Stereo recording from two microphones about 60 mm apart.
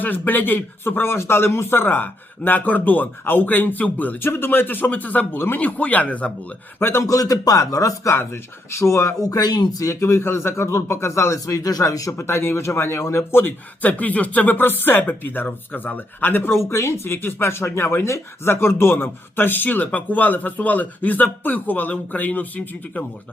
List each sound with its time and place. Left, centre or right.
0.0 s speech: left
4.2 s speech: left
6.7 s speech: left
7.0 s speech: left
9.2 s speech: left
12.1 s speech: left
13.4 s speech: left
16.6 s speech: left